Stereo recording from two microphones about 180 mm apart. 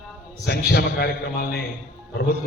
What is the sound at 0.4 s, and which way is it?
A man's voice, 60° left (ahead or behind).